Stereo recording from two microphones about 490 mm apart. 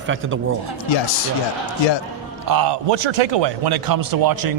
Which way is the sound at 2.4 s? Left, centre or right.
Right.